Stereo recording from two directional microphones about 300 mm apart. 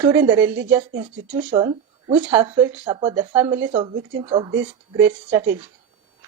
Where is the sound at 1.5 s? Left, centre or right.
Centre.